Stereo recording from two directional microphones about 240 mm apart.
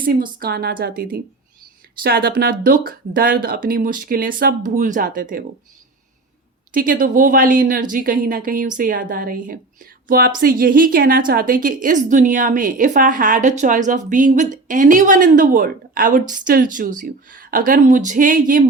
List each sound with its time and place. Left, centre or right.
0.0 s a woman's voice: right
6.7 s a woman's voice: right